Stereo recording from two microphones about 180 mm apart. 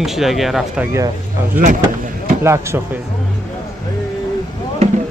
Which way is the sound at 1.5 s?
45° right (ahead or behind).